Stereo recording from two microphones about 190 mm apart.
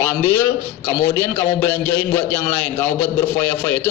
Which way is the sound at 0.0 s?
10° left (ahead or behind).